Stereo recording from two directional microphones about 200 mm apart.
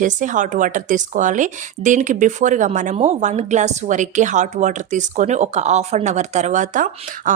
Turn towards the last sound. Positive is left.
turn(degrees=-40)  # may be behind; listen again after turning